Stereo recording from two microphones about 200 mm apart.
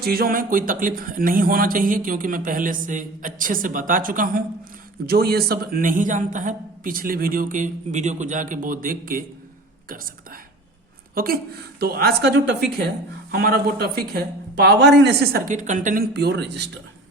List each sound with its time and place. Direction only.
0.0 s speech: 50° right (ahead or behind)
11.1 s a woman's voice: 45° right (ahead or behind)